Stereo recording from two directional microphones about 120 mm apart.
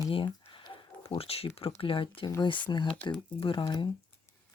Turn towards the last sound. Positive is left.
turn(degrees=40)  # may be behind; listen again after turning